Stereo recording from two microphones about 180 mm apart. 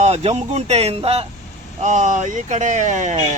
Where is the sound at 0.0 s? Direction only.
35° right (ahead or behind).